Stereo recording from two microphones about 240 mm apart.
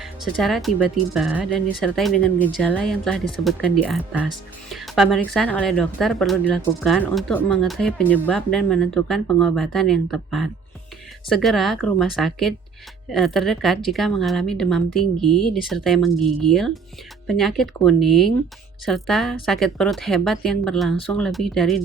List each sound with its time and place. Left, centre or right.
0.0 s speech: centre